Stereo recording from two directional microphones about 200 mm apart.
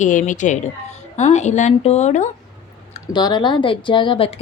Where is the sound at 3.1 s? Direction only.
20° left (ahead or behind).